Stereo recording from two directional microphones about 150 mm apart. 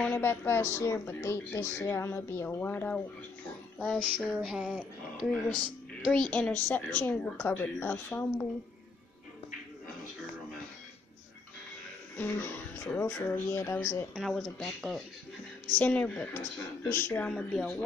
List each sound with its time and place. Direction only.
0.0 s a woman's voice: 15° left (ahead or behind)
4.2 s speech: centre (ahead or behind)
6.0 s a woman's voice: 5° left (ahead or behind)
12.2 s a woman's voice: 15° left (ahead or behind)
14.1 s speech: centre (ahead or behind)
15.6 s a woman's voice: 10° left (ahead or behind)